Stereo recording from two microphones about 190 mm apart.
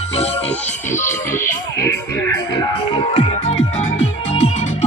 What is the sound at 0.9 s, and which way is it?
Music, 10° left (ahead or behind).